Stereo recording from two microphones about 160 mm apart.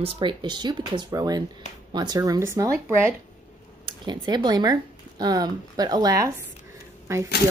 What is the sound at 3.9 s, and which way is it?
Speech, 25° right (ahead or behind).